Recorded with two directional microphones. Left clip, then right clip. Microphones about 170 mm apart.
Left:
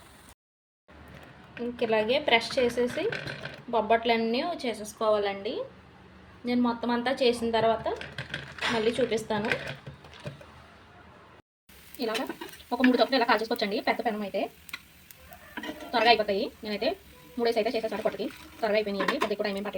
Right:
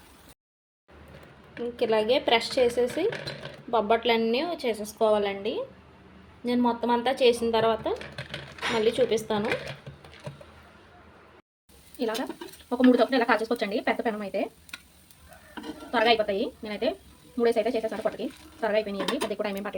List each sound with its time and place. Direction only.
1.7 s a woman's voice: 25° right (ahead or behind)
11.9 s a woman's voice: 10° right (ahead or behind)
15.5 s a woman's voice: 10° right (ahead or behind)